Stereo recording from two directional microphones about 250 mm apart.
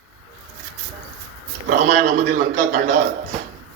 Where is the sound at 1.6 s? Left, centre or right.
Right.